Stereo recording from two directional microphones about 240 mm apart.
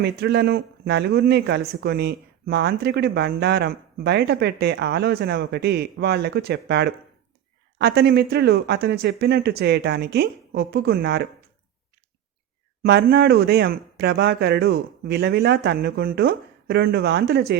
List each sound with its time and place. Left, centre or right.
0.0 s speech: right
12.8 s speech: right